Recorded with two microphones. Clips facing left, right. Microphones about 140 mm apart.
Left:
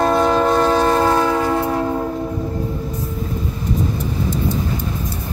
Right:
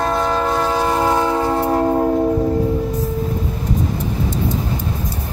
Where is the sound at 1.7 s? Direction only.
45° right (ahead or behind).